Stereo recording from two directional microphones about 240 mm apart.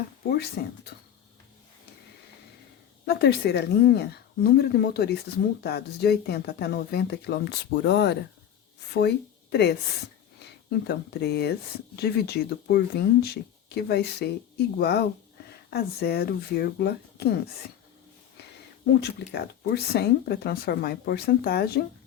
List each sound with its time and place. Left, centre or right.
0.3 s speech: left
3.1 s a woman's voice: left
18.9 s speech: left